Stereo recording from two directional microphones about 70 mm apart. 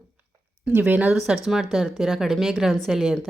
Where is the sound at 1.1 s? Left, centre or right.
Centre.